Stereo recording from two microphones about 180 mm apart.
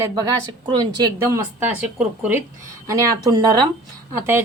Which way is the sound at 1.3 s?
10° right (ahead or behind).